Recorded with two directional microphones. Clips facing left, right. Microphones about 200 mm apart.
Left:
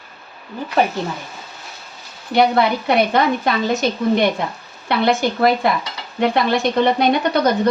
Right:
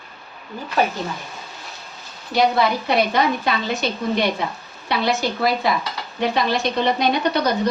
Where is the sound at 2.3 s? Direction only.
55° left (ahead or behind).